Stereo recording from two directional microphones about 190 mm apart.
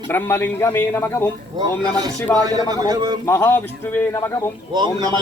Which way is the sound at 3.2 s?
10° left (ahead or behind).